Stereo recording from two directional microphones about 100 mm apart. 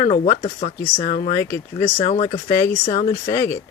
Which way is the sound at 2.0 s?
80° left.